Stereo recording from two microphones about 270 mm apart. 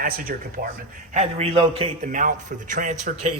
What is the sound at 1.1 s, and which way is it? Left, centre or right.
A man's voice, right.